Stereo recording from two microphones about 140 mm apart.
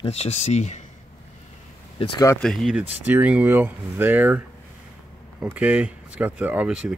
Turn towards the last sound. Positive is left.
turn(degrees=-5)  # may be behind; listen again after turning